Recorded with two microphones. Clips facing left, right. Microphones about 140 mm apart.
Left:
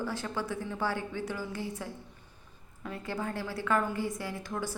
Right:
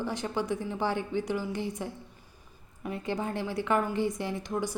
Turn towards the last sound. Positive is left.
turn(degrees=-20)  # may be behind; listen again after turning